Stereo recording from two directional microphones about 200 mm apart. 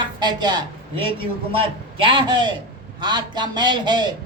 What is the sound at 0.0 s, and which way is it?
A man's voice, 20° right (ahead or behind).